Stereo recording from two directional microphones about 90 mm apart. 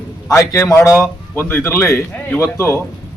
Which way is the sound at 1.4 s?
25° left (ahead or behind).